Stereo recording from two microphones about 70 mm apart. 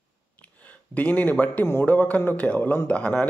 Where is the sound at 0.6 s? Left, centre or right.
Left.